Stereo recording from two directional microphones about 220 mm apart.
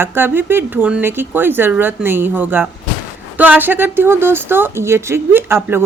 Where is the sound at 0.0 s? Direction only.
10° right (ahead or behind).